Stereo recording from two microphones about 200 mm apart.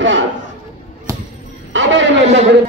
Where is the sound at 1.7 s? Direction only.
70° right (ahead or behind).